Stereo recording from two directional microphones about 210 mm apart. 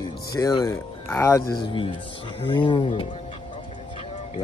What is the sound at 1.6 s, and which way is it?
Speech, 20° left (ahead or behind).